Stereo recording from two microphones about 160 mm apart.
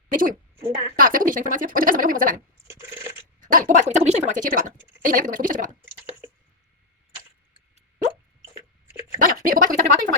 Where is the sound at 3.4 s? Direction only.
55° right (ahead or behind).